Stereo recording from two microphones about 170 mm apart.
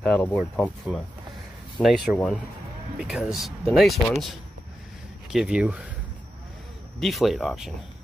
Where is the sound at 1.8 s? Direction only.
Centre (ahead or behind).